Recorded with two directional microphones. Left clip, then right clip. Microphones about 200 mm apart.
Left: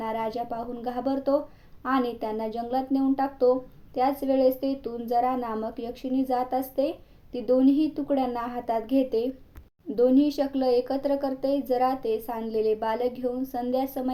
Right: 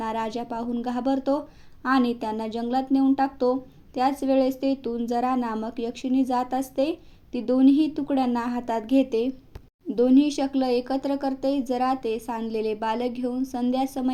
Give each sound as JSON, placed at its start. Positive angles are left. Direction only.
{"t": 0.0, "sound": "a woman's voice", "side_deg": -20}